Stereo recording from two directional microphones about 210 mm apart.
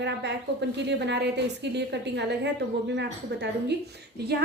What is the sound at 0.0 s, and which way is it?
A woman's voice, 55° right (ahead or behind).